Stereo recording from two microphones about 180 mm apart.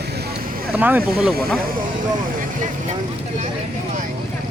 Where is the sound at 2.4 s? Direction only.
45° right (ahead or behind).